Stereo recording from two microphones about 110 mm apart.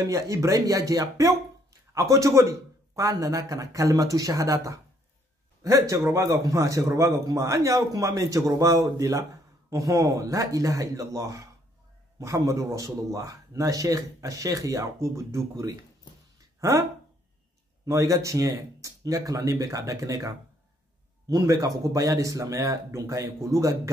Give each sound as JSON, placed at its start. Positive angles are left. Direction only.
{"t": 0.0, "sound": "a man's voice", "side_deg": -30}
{"t": 17.8, "sound": "speech", "side_deg": -30}